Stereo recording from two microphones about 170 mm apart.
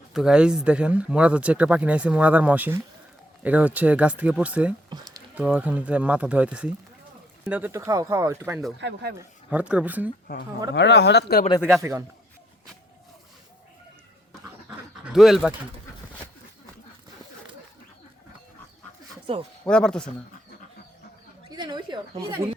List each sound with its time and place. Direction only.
0.1 s speech: 5° right (ahead or behind)
8.8 s speech: 85° right
9.1 s speech: 10° right (ahead or behind)
10.8 s speech: 90° left; by 11.4 s 70° left (ahead or behind)
11.8 s speech: 15° right (ahead or behind)
15.0 s speech: centre (ahead or behind)
19.6 s speech: 5° left (ahead or behind)
21.5 s speech: 25° right (ahead or behind)